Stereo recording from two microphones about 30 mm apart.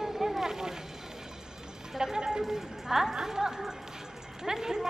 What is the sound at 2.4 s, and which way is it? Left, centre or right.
Speech, centre.